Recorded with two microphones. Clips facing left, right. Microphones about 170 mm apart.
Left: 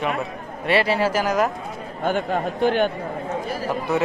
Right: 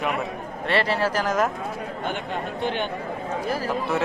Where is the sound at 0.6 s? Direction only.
10° left (ahead or behind).